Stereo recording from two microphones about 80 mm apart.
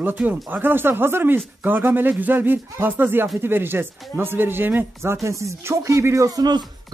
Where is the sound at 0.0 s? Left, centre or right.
Right.